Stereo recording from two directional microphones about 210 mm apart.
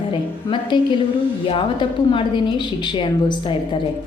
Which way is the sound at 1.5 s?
25° left (ahead or behind).